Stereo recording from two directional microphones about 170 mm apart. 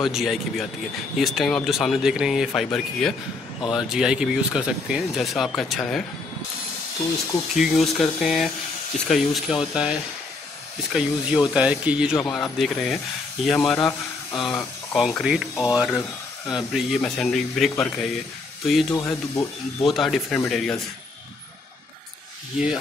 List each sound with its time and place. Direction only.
0.0 s speech: centre (ahead or behind)
7.5 s speech: centre (ahead or behind)
13.7 s speech: 25° left (ahead or behind)
15.0 s speech: 5° right (ahead or behind)